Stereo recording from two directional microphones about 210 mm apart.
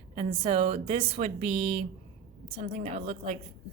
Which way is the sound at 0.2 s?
25° right (ahead or behind).